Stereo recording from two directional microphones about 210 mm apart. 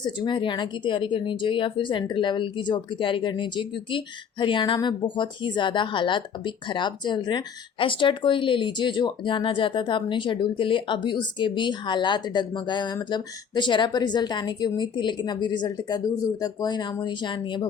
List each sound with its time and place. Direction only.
0.0 s speech: 20° left (ahead or behind)